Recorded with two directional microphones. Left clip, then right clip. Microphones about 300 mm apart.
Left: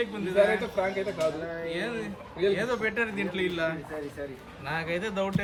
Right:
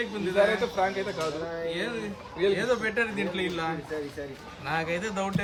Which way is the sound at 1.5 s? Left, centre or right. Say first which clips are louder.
Right 1 dB; centre.